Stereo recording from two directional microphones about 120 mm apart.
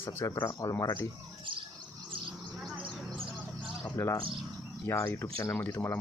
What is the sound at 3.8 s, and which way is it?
Speech, 20° left (ahead or behind).